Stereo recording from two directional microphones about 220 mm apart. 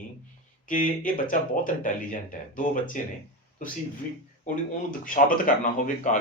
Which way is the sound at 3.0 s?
35° left (ahead or behind).